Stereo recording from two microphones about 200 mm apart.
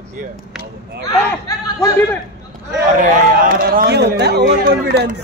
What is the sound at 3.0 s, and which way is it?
A man's voice, 45° right (ahead or behind).